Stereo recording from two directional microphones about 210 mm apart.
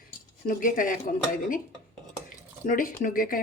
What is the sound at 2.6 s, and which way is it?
Speech, 40° left (ahead or behind).